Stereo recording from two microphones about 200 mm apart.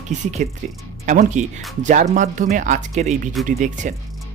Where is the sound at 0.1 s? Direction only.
35° right (ahead or behind).